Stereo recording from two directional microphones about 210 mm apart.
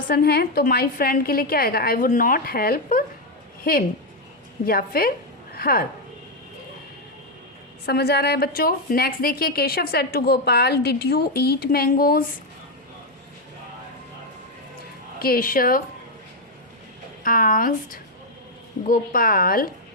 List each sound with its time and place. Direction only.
0.1 s a woman's voice: 50° left (ahead or behind)
7.9 s a woman's voice: 50° left (ahead or behind)
15.2 s a woman's voice: 45° left (ahead or behind)
17.2 s a woman's voice: 40° left (ahead or behind)